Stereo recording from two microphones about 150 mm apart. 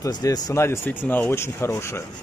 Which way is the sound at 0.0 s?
25° left (ahead or behind).